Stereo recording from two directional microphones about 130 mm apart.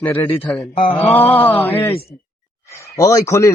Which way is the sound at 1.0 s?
50° left (ahead or behind).